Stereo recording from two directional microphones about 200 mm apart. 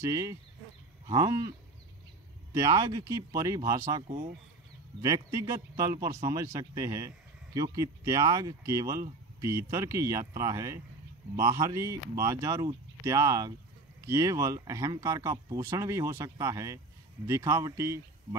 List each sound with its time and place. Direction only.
0.0 s speech: 15° right (ahead or behind)
2.5 s speech: 15° right (ahead or behind)
5.0 s speech: 15° right (ahead or behind)